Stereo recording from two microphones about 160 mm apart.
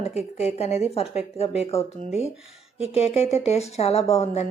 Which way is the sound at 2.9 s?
40° left (ahead or behind).